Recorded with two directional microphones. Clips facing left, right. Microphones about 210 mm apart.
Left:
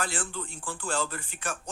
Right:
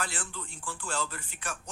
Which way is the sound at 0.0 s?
50° left (ahead or behind).